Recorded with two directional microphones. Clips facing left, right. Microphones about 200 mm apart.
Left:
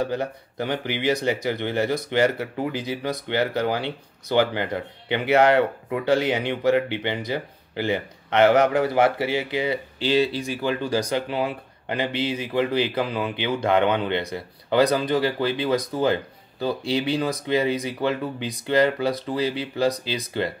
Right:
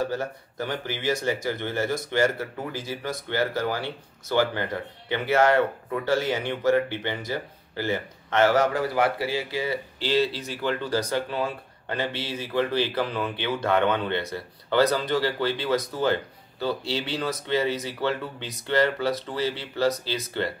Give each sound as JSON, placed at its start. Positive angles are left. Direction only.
{"t": 0.0, "sound": "speech", "side_deg": 15}